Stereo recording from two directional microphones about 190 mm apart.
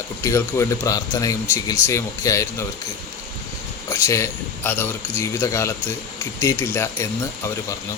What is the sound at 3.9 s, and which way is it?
A man's voice, 15° left (ahead or behind).